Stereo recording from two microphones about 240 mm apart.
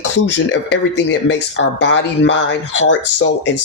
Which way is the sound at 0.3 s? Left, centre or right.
Left.